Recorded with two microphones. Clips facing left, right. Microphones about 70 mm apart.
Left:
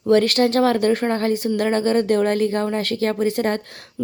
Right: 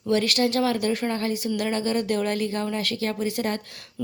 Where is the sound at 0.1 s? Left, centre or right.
Left.